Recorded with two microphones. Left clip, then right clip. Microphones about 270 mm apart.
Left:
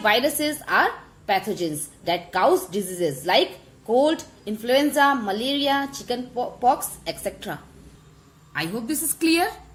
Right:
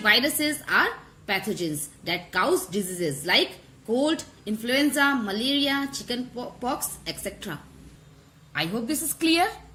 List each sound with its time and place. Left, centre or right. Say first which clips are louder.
0.0 s a woman's voice: left 1 dB; right